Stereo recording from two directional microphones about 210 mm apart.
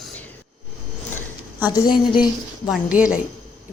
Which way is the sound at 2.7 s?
5° right (ahead or behind).